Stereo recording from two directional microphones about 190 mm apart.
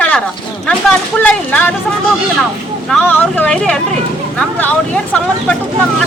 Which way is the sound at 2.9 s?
5° left (ahead or behind).